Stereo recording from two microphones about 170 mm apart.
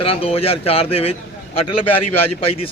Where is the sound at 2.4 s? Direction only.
35° left (ahead or behind).